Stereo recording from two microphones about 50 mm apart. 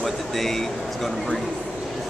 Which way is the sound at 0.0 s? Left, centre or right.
Centre.